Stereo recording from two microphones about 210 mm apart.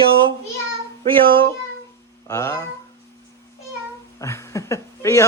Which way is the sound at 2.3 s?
15° left (ahead or behind).